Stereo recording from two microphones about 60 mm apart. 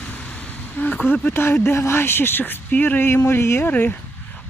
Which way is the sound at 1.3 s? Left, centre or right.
Left.